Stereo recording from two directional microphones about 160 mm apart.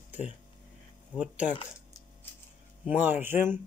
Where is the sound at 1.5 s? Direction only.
30° left (ahead or behind).